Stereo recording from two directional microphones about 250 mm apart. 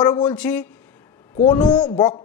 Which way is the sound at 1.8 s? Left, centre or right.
Centre.